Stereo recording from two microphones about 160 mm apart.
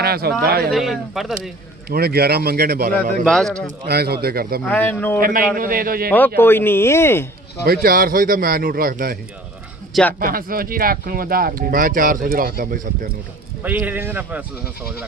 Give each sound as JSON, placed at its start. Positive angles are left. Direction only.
{"t": 0.0, "sound": "speech", "side_deg": -75}
{"t": 0.7, "sound": "speech", "side_deg": 0}
{"t": 1.9, "sound": "speech", "side_deg": -75}
{"t": 3.2, "sound": "speech", "side_deg": 5}
{"t": 3.8, "sound": "speech", "side_deg": -85}
{"t": 4.7, "sound": "speech", "side_deg": 10}
{"t": 5.2, "sound": "speech", "side_deg": -60}
{"t": 6.1, "sound": "speech", "side_deg": 10}
{"t": 7.6, "sound": "speech", "side_deg": -75}
{"t": 9.9, "sound": "speech", "side_deg": 10}
{"t": 10.2, "sound": "speech", "side_deg": -65}
{"t": 13.6, "sound": "speech", "side_deg": -10}